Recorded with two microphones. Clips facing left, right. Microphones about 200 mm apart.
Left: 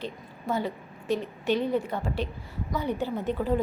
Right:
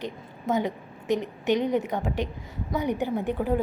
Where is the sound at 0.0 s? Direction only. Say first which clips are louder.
Right 2 dB; 15° right (ahead or behind).